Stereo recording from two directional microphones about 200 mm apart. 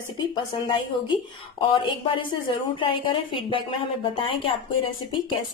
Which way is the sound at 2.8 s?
25° left (ahead or behind).